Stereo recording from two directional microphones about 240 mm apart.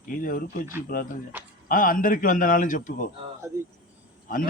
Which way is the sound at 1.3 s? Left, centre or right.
Centre.